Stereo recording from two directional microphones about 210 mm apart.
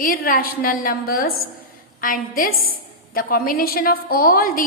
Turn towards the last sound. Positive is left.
turn(degrees=40)  # may be behind; listen again after turning